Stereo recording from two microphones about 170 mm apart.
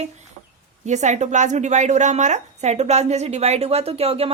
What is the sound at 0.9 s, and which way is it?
A woman's voice, 45° right (ahead or behind).